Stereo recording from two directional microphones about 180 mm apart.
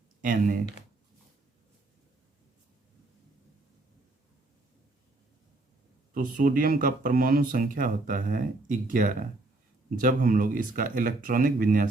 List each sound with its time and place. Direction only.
0.2 s speech: 50° right (ahead or behind)
6.1 s speech: 50° right (ahead or behind)